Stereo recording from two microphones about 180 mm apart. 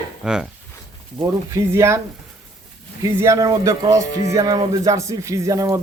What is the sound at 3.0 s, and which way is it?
Speech, 15° right (ahead or behind).